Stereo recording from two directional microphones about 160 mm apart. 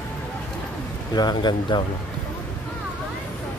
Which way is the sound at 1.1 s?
25° left (ahead or behind).